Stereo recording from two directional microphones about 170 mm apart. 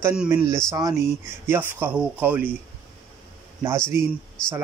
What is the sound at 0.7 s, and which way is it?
Speech, 20° right (ahead or behind).